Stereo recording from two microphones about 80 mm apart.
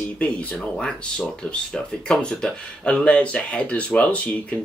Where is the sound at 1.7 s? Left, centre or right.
Centre.